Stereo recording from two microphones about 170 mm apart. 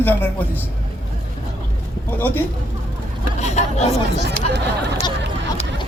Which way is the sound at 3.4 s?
40° left (ahead or behind).